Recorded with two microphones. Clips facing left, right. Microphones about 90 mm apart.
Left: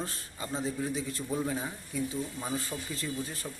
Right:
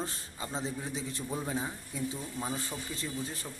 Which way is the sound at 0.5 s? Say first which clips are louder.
Left 4 dB; 25° right (ahead or behind).